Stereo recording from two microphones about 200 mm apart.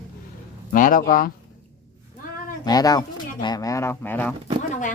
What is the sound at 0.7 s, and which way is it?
Speech, 45° left (ahead or behind).